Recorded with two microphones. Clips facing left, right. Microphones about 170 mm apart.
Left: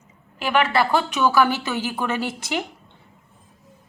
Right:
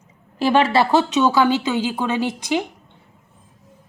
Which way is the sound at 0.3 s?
30° right (ahead or behind).